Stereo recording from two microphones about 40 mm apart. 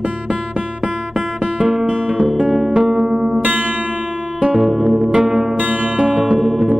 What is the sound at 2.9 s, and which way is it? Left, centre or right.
Music, centre.